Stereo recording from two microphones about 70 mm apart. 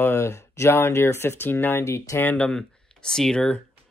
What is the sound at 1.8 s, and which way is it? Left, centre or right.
Speech, left.